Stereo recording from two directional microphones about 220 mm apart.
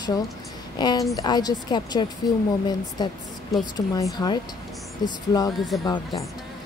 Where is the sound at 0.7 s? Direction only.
20° left (ahead or behind).